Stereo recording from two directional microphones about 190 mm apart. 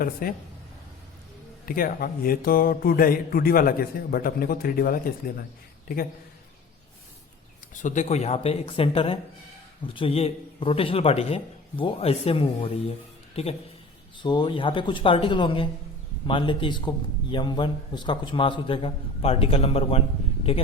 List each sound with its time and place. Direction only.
0.0 s a man's voice: 50° left (ahead or behind)
1.6 s a man's voice: 50° left (ahead or behind)
7.7 s a man's voice: 40° left (ahead or behind)